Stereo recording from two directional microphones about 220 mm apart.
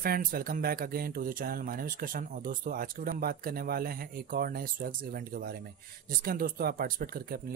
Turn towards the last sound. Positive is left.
turn(degrees=-45)  # may be behind; listen again after turning